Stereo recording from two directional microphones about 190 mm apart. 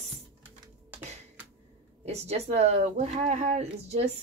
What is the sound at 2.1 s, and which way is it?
Speech, 35° right (ahead or behind).